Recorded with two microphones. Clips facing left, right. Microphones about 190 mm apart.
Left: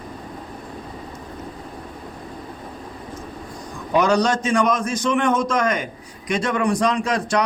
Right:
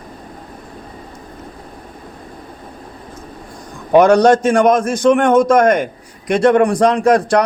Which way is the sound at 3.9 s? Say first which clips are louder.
Right 9 dB; 55° right (ahead or behind).